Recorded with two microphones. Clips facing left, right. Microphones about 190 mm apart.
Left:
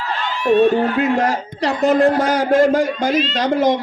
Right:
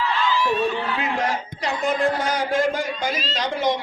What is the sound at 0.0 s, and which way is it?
A man's voice, 40° left (ahead or behind).